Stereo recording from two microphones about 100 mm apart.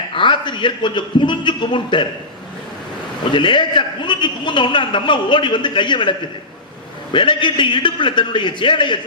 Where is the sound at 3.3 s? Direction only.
55° left (ahead or behind).